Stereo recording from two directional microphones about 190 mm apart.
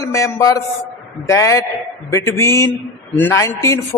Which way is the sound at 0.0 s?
15° left (ahead or behind).